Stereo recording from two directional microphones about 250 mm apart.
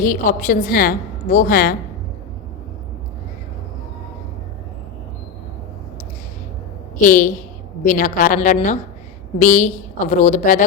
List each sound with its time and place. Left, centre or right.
0.0 s a woman's voice: left
7.0 s a woman's voice: left